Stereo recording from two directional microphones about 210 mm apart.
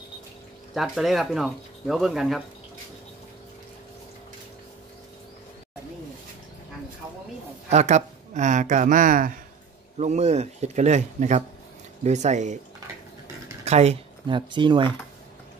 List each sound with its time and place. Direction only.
0.7 s speech: centre (ahead or behind)
7.7 s speech: 35° right (ahead or behind)
13.7 s speech: 30° right (ahead or behind)